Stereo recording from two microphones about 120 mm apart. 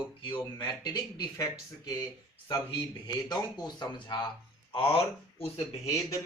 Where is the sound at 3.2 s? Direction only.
35° left (ahead or behind); by 5.6 s 50° left (ahead or behind).